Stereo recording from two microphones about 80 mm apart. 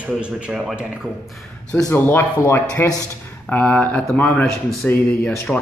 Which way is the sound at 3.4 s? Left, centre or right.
Centre.